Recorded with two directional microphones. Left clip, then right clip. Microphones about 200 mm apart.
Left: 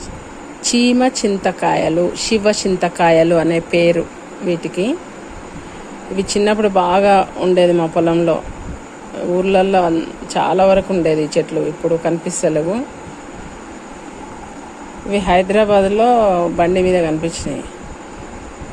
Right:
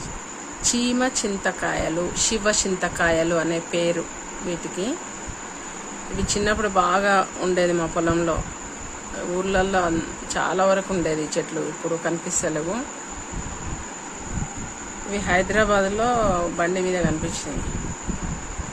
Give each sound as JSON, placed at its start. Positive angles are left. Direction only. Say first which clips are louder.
{"t": 0.6, "sound": "speech", "louder": "left 8 dB", "side_deg": 20}
{"t": 6.1, "sound": "speech", "louder": "left 8 dB", "side_deg": 20}
{"t": 9.4, "sound": "speech", "louder": "left 8 dB", "side_deg": 15}
{"t": 15.1, "sound": "speech", "louder": "left 8 dB", "side_deg": 20}